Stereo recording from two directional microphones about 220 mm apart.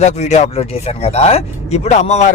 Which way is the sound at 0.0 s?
30° left (ahead or behind).